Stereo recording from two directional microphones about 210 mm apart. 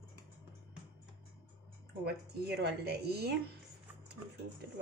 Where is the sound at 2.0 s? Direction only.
50° right (ahead or behind).